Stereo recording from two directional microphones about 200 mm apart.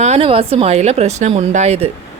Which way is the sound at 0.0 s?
30° right (ahead or behind).